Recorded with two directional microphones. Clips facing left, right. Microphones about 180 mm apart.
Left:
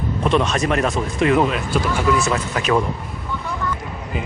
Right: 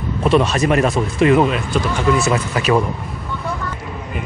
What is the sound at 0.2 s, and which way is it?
Speech, 5° right (ahead or behind).